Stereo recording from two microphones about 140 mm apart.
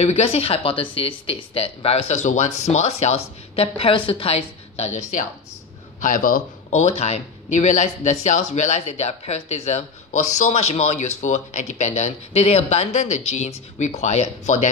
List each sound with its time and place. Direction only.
0.0 s speech: 45° left (ahead or behind)
5.9 s speech: 70° left (ahead or behind)